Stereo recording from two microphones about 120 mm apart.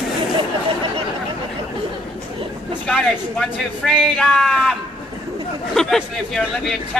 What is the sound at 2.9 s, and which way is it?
Speech, centre (ahead or behind).